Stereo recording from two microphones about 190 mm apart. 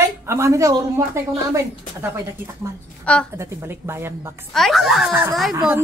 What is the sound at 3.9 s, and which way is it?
Speech, 15° right (ahead or behind).